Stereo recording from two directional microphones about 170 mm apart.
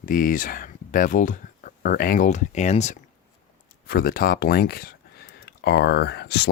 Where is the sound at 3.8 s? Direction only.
60° left (ahead or behind).